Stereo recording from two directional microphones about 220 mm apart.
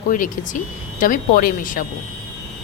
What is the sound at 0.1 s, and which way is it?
A woman's voice, 35° left (ahead or behind).